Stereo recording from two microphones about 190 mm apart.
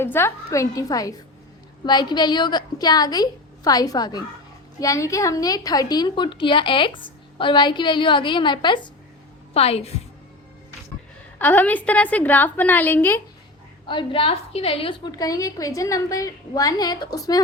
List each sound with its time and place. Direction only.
0.0 s a woman's voice: 15° left (ahead or behind); by 9.9 s 30° left (ahead or behind)
11.3 s a woman's voice: 10° left (ahead or behind)
13.8 s a woman's voice: 25° left (ahead or behind)